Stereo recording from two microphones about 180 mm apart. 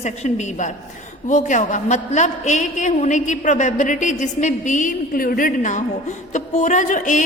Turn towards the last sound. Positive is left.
turn(degrees=45)  # may be behind; listen again after turning